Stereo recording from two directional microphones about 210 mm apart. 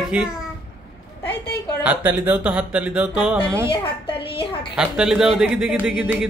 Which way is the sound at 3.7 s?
25° left (ahead or behind).